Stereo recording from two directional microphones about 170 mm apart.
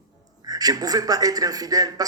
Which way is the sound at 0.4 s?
20° right (ahead or behind).